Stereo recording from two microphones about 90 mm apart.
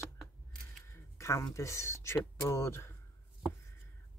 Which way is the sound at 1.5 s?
35° left (ahead or behind).